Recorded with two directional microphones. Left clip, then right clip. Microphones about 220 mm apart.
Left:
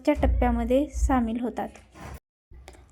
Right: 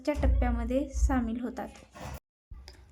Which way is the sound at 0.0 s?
20° left (ahead or behind).